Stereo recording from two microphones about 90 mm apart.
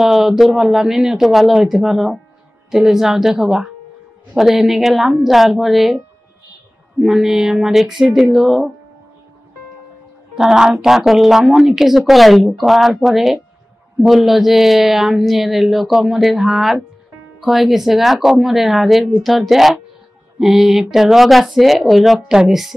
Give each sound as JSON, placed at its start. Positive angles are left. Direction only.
{"t": 0.0, "sound": "speech", "side_deg": -5}
{"t": 7.0, "sound": "speech", "side_deg": -5}
{"t": 10.3, "sound": "speech", "side_deg": -5}
{"t": 12.6, "sound": "speech", "side_deg": 0}